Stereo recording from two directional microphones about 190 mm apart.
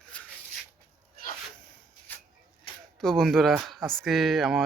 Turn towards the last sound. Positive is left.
turn(degrees=0)  # may be behind; listen again after turning